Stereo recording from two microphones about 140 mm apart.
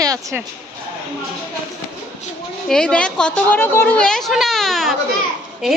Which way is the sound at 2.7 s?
5° left (ahead or behind).